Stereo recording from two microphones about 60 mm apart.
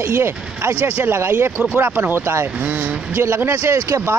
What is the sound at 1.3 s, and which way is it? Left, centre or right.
Speech, right.